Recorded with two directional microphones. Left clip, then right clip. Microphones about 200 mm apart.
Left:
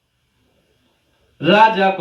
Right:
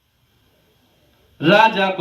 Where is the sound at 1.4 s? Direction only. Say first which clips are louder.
Left 1 dB; 35° right (ahead or behind).